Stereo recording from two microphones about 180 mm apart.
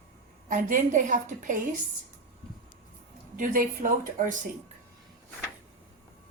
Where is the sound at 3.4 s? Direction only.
45° right (ahead or behind).